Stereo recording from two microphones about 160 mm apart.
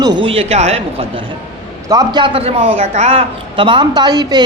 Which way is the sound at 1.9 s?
25° right (ahead or behind).